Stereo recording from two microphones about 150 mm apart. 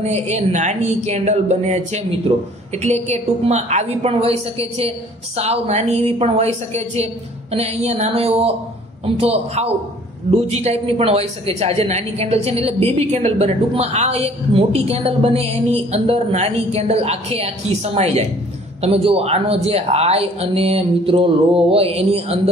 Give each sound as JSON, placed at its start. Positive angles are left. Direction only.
{"t": 0.0, "sound": "a man's voice", "side_deg": -45}